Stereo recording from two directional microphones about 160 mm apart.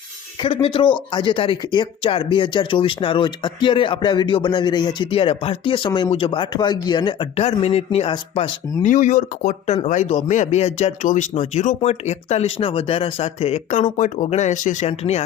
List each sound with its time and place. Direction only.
0.5 s speech: 35° left (ahead or behind)
8.8 s speech: 50° left (ahead or behind)